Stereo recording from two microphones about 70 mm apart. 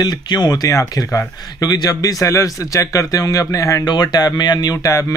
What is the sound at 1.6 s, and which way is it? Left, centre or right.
Speech, left.